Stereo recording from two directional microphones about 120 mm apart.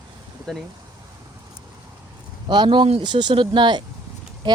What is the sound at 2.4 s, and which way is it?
Speech, 40° right (ahead or behind).